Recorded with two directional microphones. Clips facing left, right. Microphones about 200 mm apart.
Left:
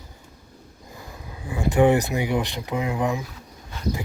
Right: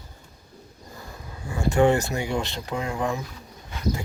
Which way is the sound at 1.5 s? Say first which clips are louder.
Left 2 dB; 15° left (ahead or behind).